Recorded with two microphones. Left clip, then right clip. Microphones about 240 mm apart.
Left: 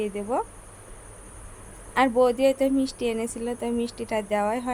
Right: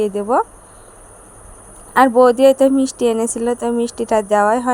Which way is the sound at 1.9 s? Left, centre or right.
Centre.